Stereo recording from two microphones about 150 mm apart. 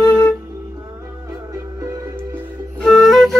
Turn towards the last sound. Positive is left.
turn(degrees=0)  # may be behind; listen again after turning